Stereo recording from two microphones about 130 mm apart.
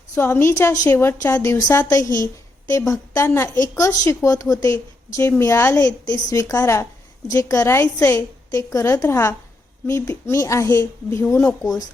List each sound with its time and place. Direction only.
0.2 s a woman's voice: 20° left (ahead or behind)